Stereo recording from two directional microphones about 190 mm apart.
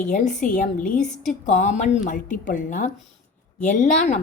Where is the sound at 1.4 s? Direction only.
40° left (ahead or behind).